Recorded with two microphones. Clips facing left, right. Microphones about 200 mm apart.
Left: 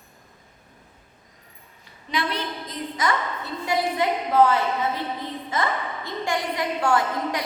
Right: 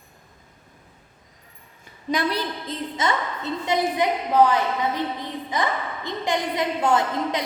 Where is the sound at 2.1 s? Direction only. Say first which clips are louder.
Right 3 dB; 40° right (ahead or behind).